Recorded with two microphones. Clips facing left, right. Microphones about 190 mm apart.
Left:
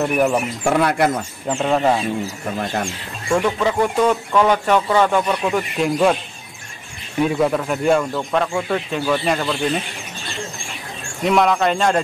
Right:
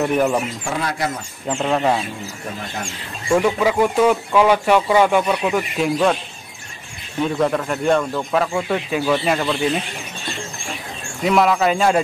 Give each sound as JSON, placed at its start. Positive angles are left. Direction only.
{"t": 0.1, "sound": "speech", "side_deg": 5}
{"t": 0.7, "sound": "speech", "side_deg": 60}
{"t": 1.5, "sound": "speech", "side_deg": 5}
{"t": 3.3, "sound": "speech", "side_deg": -5}
{"t": 7.2, "sound": "speech", "side_deg": 5}
{"t": 11.2, "sound": "speech", "side_deg": 0}